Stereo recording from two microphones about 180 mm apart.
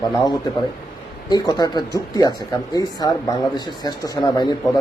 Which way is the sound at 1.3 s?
20° left (ahead or behind).